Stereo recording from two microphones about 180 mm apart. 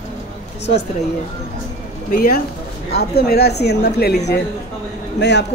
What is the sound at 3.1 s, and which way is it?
Speech, 60° left (ahead or behind).